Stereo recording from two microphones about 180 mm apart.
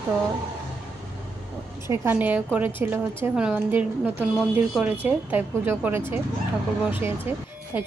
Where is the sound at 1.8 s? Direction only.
15° right (ahead or behind).